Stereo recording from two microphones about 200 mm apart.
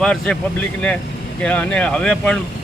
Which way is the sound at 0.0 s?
5° left (ahead or behind).